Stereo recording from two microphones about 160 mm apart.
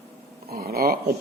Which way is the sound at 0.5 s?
70° right (ahead or behind).